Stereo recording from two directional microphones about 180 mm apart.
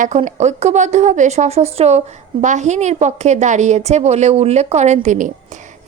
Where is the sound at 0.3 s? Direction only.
40° right (ahead or behind).